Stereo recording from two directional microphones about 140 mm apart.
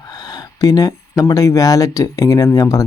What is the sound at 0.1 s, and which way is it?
Speech, 30° left (ahead or behind).